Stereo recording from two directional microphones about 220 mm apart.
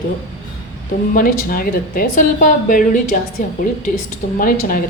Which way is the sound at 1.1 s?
40° left (ahead or behind).